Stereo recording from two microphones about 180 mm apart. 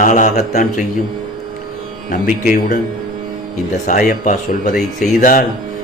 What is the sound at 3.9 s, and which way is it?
Speech, 45° left (ahead or behind).